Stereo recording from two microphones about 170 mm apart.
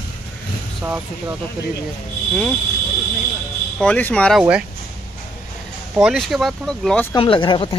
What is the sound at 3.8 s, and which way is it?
Speech, 10° left (ahead or behind).